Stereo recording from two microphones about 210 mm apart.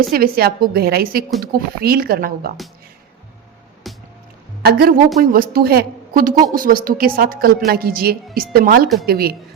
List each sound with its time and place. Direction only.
0.1 s a woman's voice: 45° right (ahead or behind)
3.9 s music: centre (ahead or behind)
4.6 s a woman's voice: 45° right (ahead or behind)